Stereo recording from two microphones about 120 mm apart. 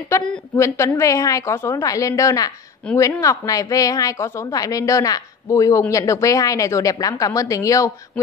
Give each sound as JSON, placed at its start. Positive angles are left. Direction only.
{"t": 0.1, "sound": "a woman's voice", "side_deg": 25}